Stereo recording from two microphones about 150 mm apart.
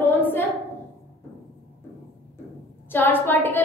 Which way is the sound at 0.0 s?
15° left (ahead or behind).